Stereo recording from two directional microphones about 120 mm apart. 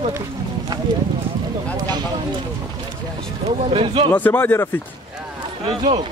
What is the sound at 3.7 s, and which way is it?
Speech, 50° right (ahead or behind).